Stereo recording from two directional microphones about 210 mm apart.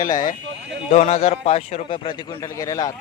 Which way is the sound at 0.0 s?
40° left (ahead or behind).